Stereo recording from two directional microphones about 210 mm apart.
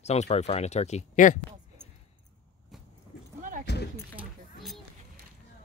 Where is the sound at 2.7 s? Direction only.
Centre (ahead or behind).